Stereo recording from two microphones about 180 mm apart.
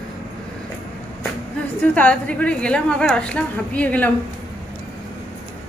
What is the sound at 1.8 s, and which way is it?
A woman's voice, 5° left (ahead or behind).